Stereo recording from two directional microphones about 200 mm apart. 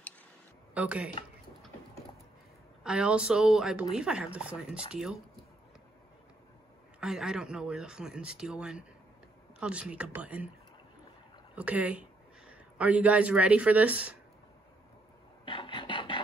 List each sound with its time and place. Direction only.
0.7 s speech: 5° right (ahead or behind)
2.8 s speech: 5° right (ahead or behind)
7.0 s speech: 5° right (ahead or behind)
11.5 s speech: 5° right (ahead or behind)
15.4 s a sound: 25° left (ahead or behind)